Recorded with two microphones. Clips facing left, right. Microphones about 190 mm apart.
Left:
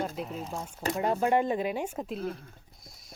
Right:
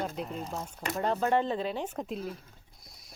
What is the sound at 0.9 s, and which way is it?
Speech, 10° left (ahead or behind).